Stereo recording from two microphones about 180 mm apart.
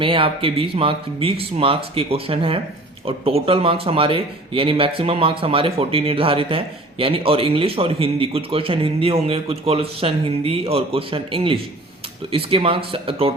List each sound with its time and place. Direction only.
0.0 s speech: 30° right (ahead or behind)